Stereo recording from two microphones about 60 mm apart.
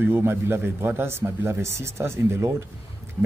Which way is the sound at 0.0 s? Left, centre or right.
Right.